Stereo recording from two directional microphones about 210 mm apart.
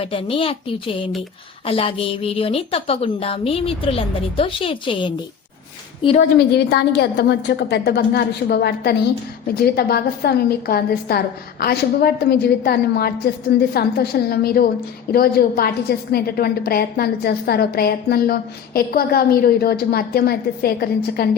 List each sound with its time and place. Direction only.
0.0 s a woman's voice: 25° left (ahead or behind)
6.1 s a woman's voice: 50° left (ahead or behind)